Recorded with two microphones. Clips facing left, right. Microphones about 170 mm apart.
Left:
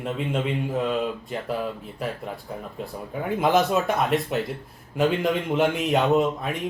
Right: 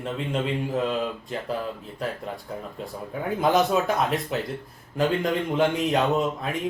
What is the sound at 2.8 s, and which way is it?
A man's voice, centre (ahead or behind).